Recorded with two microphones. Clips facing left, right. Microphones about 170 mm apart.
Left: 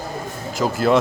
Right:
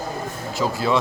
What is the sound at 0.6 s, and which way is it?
Speech, 50° left (ahead or behind).